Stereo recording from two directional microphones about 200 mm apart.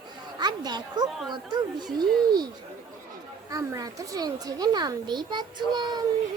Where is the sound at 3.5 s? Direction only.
15° right (ahead or behind).